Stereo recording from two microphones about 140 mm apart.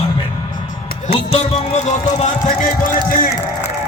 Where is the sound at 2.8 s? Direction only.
80° left.